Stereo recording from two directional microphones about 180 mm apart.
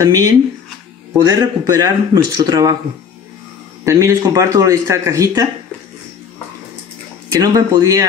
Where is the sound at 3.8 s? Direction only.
15° right (ahead or behind).